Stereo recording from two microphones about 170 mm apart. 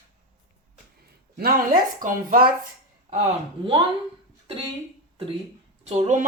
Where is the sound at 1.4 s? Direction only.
60° right (ahead or behind).